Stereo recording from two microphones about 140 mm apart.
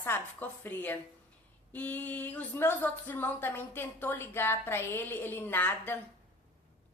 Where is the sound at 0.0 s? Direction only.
15° left (ahead or behind).